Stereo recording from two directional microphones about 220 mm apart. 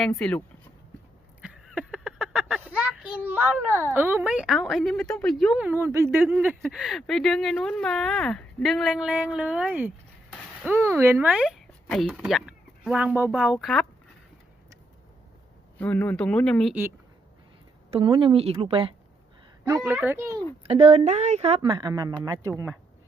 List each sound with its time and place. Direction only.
0.0 s speech: 5° left (ahead or behind)
1.4 s a sound: 5° right (ahead or behind)
2.6 s a child's voice: 5° right (ahead or behind)
15.8 s speech: 5° left (ahead or behind)
17.9 s a woman's voice: 25° right (ahead or behind)
19.8 s a child's voice: 5° right (ahead or behind)
20.7 s a woman's voice: 25° right (ahead or behind)